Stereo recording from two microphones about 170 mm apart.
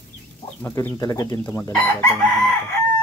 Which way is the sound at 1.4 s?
10° left (ahead or behind).